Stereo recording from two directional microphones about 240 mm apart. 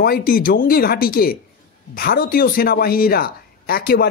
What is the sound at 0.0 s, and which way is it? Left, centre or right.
Speech, left.